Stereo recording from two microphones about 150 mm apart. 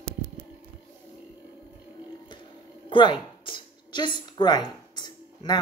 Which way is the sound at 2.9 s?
35° left (ahead or behind).